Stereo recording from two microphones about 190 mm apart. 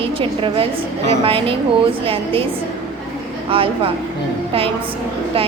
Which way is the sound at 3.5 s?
30° right (ahead or behind).